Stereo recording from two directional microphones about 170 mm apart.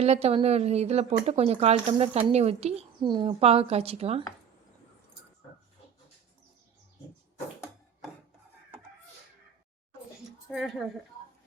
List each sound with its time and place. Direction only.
0.0 s speech: 40° right (ahead or behind)
10.5 s a woman's voice: centre (ahead or behind)